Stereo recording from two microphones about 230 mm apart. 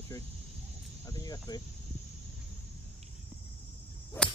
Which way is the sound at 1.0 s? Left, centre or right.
Centre.